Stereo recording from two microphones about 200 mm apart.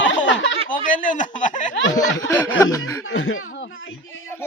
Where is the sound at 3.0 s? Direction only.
75° left (ahead or behind).